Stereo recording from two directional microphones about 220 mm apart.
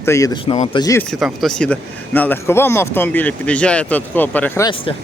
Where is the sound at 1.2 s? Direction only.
Centre (ahead or behind).